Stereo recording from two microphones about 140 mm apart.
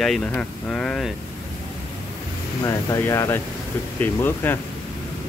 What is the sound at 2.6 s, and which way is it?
Speech, 20° left (ahead or behind).